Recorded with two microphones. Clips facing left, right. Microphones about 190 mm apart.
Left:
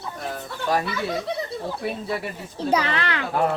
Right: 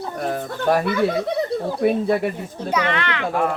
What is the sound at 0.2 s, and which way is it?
Speech, 50° right (ahead or behind).